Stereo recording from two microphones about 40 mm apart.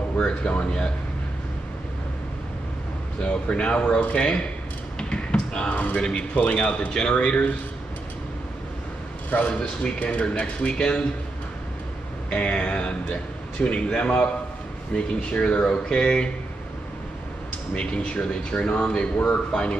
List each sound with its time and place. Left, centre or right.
0.5 s speech: left
3.2 s speech: left
5.7 s speech: left
5.9 s speech: left
9.5 s speech: left
12.3 s speech: left
17.7 s speech: left